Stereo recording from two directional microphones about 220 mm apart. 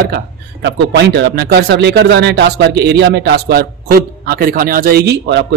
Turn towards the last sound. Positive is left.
turn(degrees=-50)  # may be behind; listen again after turning